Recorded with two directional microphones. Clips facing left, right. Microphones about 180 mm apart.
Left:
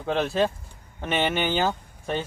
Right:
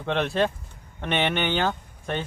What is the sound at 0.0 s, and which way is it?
Speech, 5° left (ahead or behind).